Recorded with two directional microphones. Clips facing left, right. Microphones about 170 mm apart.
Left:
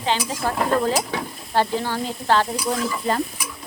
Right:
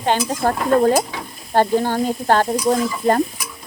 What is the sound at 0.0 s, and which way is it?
Sizzle, 50° right (ahead or behind).